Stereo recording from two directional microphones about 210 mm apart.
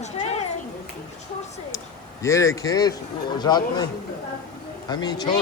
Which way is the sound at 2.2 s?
15° left (ahead or behind).